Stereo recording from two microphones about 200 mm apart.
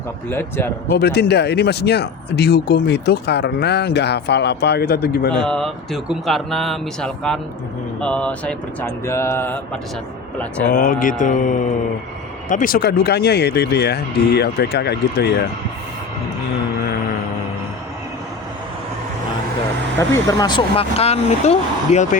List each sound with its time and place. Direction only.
0.3 s speech: 10° left (ahead or behind)
0.9 s speech: 55° left (ahead or behind)
5.4 s speech: 5° left (ahead or behind)
10.7 s mantra: 45° left (ahead or behind)
12.5 s speech: 45° left (ahead or behind)
20.0 s speech: 20° left (ahead or behind); by 22.2 s 35° left (ahead or behind)